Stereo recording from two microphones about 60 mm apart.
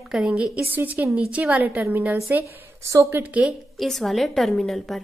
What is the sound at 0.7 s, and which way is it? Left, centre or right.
Speech, right.